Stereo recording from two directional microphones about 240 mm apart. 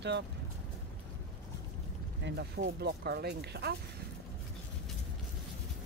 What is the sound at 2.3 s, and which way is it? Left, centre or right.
Speech, right.